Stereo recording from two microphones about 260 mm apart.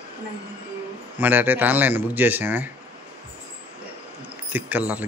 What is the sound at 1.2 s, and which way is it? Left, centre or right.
Speech, centre.